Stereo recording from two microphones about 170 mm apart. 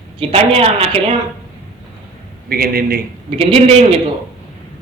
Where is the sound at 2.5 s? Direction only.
60° right (ahead or behind).